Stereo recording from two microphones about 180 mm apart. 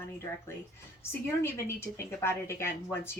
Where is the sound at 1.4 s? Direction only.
15° left (ahead or behind).